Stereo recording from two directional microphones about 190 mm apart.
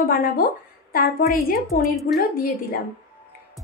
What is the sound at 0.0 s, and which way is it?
Speech, 50° left (ahead or behind).